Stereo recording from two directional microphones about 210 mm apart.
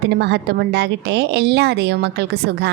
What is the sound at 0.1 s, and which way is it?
A woman's voice, 50° right (ahead or behind).